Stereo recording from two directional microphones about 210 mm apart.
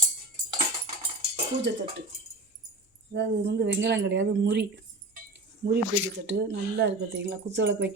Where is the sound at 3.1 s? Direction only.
55° right (ahead or behind).